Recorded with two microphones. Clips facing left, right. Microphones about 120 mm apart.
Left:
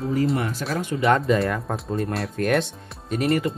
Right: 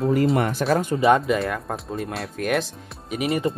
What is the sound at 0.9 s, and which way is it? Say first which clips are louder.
Speech: right 3 dB; 35° right (ahead or behind).